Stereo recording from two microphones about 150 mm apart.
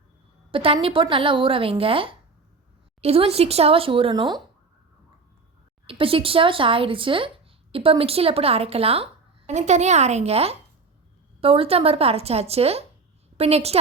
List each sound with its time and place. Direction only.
0.5 s speech: 35° right (ahead or behind)
5.8 s a woman's voice: 40° right (ahead or behind)